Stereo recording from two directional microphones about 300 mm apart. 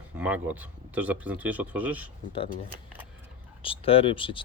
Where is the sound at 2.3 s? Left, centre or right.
Centre.